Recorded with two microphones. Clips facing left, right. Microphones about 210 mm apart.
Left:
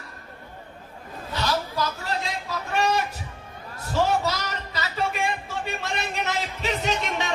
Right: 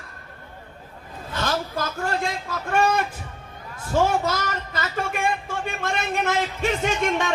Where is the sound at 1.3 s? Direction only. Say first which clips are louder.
Right 1 dB; 50° right (ahead or behind).